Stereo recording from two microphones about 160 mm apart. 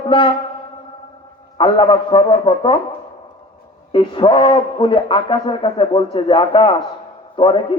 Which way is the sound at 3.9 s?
30° left (ahead or behind).